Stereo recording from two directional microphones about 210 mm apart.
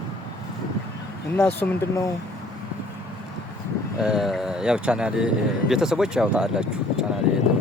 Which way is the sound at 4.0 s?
Centre (ahead or behind).